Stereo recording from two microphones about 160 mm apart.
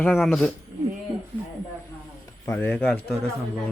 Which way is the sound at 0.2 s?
Centre (ahead or behind).